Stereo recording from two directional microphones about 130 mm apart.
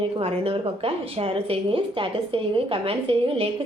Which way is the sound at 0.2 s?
45° right (ahead or behind).